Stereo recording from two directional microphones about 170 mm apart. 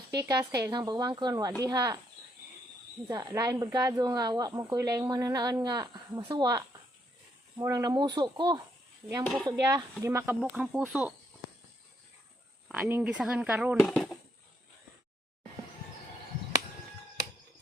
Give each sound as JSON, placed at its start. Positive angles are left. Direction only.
{"t": 0.2, "sound": "speech", "side_deg": -20}
{"t": 3.1, "sound": "speech", "side_deg": -20}
{"t": 9.2, "sound": "speech", "side_deg": 5}
{"t": 9.5, "sound": "speech", "side_deg": -20}
{"t": 12.6, "sound": "speech", "side_deg": -5}